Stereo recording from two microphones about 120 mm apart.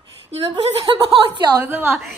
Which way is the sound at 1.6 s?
15° right (ahead or behind).